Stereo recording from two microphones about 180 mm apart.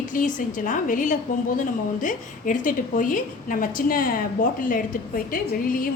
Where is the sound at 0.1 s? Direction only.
45° left (ahead or behind).